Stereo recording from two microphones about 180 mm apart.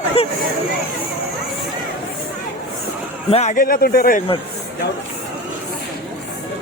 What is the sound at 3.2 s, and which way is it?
Speech, 35° left (ahead or behind).